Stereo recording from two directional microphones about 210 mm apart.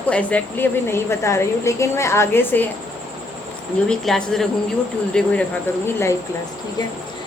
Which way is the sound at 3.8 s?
Centre (ahead or behind).